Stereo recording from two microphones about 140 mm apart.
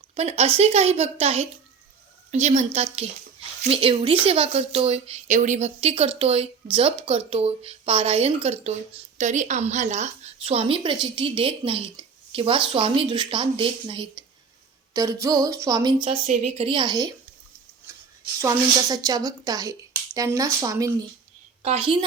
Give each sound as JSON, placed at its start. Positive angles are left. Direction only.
{"t": 0.1, "sound": "speech", "side_deg": -50}
{"t": 14.9, "sound": "speech", "side_deg": -25}
{"t": 16.2, "sound": "speech", "side_deg": -55}
{"t": 17.9, "sound": "a sound", "side_deg": -20}
{"t": 18.3, "sound": "speech", "side_deg": -25}
{"t": 21.6, "sound": "a woman's voice", "side_deg": -45}